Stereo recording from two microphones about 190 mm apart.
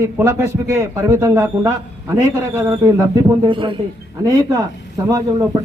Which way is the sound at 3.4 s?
25° right (ahead or behind).